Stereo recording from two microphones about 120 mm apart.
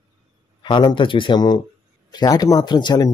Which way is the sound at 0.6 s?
40° left (ahead or behind).